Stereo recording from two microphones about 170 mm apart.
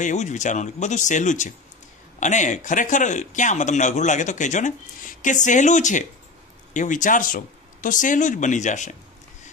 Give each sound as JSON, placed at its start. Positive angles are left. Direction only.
{"t": 0.0, "sound": "a man's voice", "side_deg": 45}